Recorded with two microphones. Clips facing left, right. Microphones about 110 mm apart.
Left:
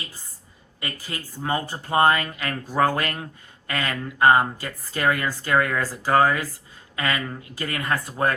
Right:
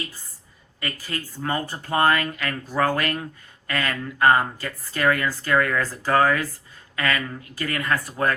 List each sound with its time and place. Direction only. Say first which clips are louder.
0.8 s speech: right 2 dB; 20° left (ahead or behind)